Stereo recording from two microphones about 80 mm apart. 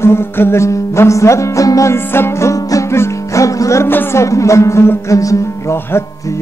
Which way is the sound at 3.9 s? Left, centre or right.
Left.